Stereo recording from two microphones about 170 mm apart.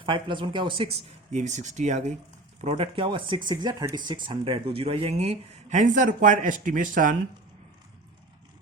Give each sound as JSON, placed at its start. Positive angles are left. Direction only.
{"t": 0.0, "sound": "speech", "side_deg": -30}
{"t": 1.3, "sound": "speech", "side_deg": -45}